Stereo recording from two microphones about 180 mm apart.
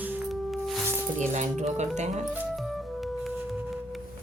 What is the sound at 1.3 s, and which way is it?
Speech, 40° right (ahead or behind).